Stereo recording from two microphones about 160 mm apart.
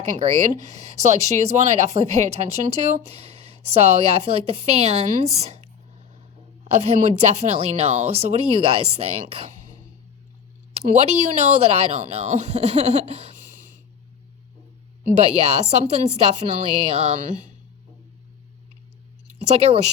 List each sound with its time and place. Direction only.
0.5 s speech: 45° right (ahead or behind)
6.7 s a woman's voice: 45° right (ahead or behind)
10.8 s speech: 40° right (ahead or behind)
15.1 s a woman's voice: 40° right (ahead or behind)
19.5 s a woman's voice: 40° right (ahead or behind)